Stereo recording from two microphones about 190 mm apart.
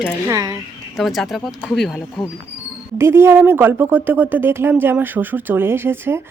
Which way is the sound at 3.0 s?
15° right (ahead or behind).